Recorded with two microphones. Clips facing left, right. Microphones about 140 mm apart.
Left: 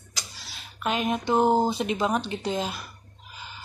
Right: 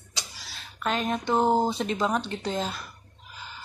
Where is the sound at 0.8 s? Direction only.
10° left (ahead or behind).